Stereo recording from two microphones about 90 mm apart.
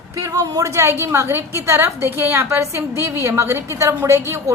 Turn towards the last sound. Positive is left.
turn(degrees=-30)  # may be behind; listen again after turning